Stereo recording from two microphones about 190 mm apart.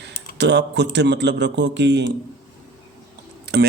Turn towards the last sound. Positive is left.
turn(degrees=-60)  # may be behind; listen again after turning